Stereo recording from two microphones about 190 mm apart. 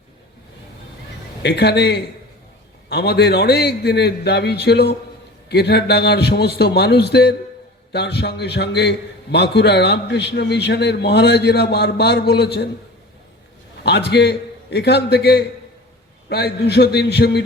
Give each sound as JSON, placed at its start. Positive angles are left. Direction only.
{"t": 1.4, "sound": "a man's voice", "side_deg": 60}
{"t": 13.8, "sound": "a man's voice", "side_deg": 60}